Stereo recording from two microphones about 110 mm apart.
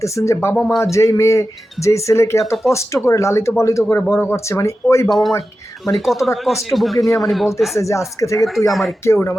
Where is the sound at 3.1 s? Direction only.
25° left (ahead or behind).